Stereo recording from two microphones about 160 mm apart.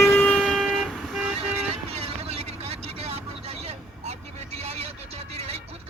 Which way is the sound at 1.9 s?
40° right (ahead or behind).